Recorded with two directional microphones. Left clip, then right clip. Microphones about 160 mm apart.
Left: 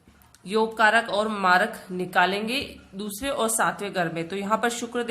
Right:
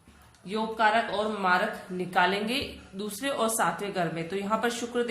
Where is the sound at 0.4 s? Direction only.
40° left (ahead or behind).